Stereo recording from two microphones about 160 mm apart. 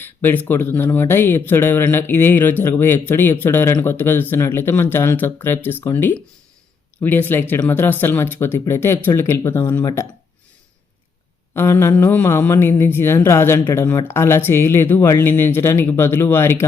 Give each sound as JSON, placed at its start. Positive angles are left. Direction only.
{"t": 0.0, "sound": "speech", "side_deg": 15}
{"t": 11.5, "sound": "speech", "side_deg": 15}